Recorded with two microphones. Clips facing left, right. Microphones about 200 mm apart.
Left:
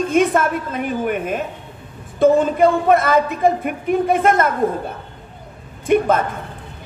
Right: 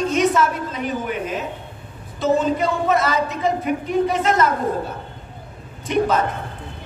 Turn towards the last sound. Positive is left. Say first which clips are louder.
# left 4 dB
turn(degrees=55)  # may be behind; listen again after turning